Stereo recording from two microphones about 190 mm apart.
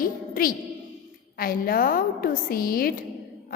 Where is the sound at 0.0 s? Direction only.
50° left (ahead or behind).